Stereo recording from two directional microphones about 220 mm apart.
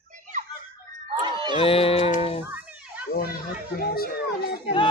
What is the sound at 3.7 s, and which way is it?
Speech, 45° left (ahead or behind).